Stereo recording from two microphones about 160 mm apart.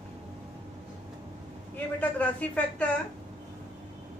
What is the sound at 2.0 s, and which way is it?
Speech, 10° left (ahead or behind).